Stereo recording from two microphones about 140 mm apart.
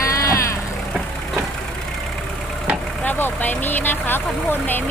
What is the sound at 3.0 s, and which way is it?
Vehicle, 15° left (ahead or behind).